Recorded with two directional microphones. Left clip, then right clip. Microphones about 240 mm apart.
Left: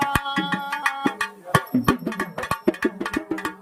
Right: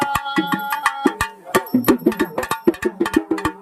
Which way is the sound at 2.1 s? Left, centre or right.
Right.